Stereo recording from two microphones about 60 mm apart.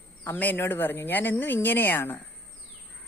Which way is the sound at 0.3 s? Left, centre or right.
Left.